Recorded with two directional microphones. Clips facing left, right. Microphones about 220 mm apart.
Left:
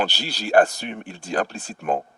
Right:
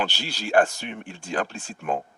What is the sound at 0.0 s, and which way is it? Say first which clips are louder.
Speech: left 3 dB; 40° left (ahead or behind).